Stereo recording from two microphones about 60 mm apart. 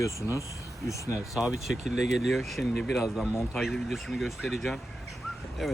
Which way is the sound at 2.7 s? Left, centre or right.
Centre.